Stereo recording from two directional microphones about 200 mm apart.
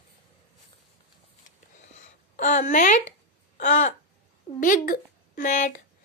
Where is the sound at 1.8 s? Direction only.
40° left (ahead or behind).